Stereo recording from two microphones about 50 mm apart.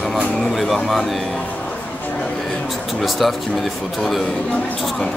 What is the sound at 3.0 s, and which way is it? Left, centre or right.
Speech, centre.